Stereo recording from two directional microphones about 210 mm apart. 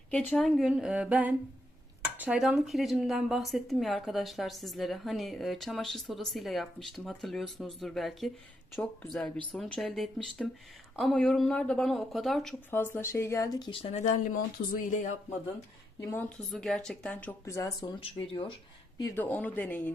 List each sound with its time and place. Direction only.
0.1 s speech: 5° left (ahead or behind)
9.5 s speech: 5° left (ahead or behind); by 15.1 s 40° left (ahead or behind)
16.0 s speech: 15° left (ahead or behind)
16.5 s speech: 5° left (ahead or behind); by 18.5 s 25° left (ahead or behind)
18.9 s speech: 10° left (ahead or behind)